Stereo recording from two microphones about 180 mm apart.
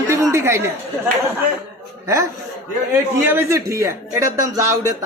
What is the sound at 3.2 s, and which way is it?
Speech, 15° right (ahead or behind).